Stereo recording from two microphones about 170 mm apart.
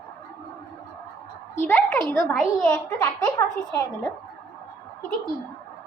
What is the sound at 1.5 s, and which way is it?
Speech, 10° left (ahead or behind).